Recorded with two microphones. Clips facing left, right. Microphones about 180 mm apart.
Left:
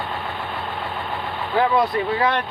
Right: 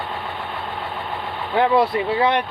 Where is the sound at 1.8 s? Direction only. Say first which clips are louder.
Right 2 dB; 25° right (ahead or behind).